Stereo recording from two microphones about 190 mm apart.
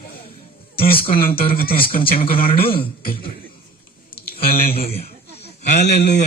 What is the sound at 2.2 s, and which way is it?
Speech, 30° left (ahead or behind).